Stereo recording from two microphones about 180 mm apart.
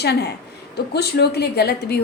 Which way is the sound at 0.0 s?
65° left (ahead or behind).